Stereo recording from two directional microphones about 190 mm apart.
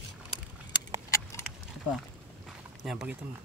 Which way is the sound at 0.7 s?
15° left (ahead or behind).